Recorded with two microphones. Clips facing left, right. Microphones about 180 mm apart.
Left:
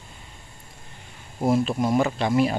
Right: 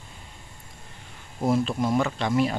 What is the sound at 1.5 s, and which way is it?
Speech, 10° left (ahead or behind).